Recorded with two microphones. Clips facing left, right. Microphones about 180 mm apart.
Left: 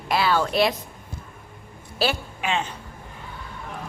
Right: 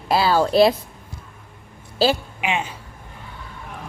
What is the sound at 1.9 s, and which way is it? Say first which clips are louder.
Speech: right 6 dB; 30° right (ahead or behind).